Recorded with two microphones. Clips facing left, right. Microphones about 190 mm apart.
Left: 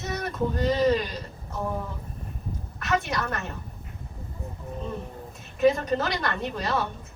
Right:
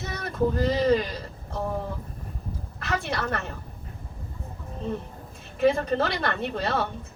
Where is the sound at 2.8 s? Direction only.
30° right (ahead or behind).